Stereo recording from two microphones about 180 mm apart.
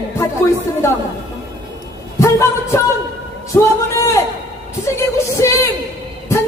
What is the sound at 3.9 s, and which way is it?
Speech, 15° left (ahead or behind).